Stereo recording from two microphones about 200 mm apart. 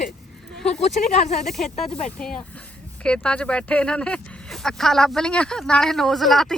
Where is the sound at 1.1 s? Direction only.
35° left (ahead or behind).